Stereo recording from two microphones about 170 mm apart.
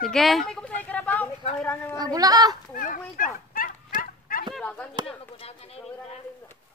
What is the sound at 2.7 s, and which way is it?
Speech, 55° left (ahead or behind).